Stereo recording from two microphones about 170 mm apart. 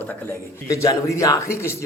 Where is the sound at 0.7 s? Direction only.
20° left (ahead or behind).